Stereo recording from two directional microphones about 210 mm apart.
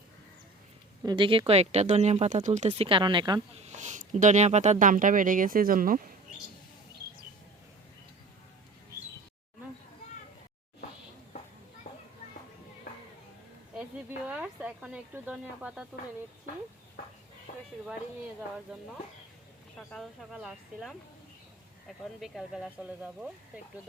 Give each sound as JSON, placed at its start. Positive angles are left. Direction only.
{"t": 1.0, "sound": "speech", "side_deg": -20}
{"t": 3.7, "sound": "speech", "side_deg": -35}
{"t": 11.9, "sound": "children playing", "side_deg": 35}
{"t": 14.3, "sound": "speech", "side_deg": -5}
{"t": 17.5, "sound": "speech", "side_deg": 35}
{"t": 18.7, "sound": "speech", "side_deg": -5}
{"t": 19.9, "sound": "speech", "side_deg": 0}